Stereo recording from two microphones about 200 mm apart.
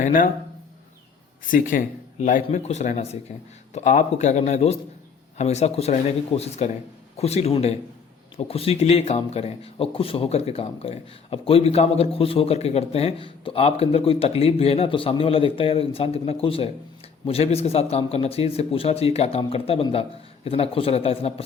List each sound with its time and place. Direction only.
0.0 s speech: 40° left (ahead or behind)
1.5 s speech: 40° left (ahead or behind)